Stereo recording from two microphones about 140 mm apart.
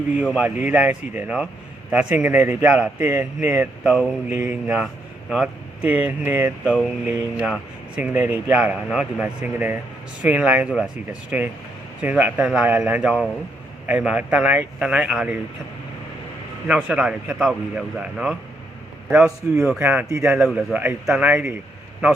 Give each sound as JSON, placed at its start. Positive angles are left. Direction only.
{"t": 0.2, "sound": "a man's voice", "side_deg": 0}
{"t": 0.7, "sound": "a man's voice", "side_deg": -10}
{"t": 16.6, "sound": "a man's voice", "side_deg": -5}
{"t": 19.4, "sound": "speech", "side_deg": -10}
{"t": 20.2, "sound": "speech", "side_deg": -5}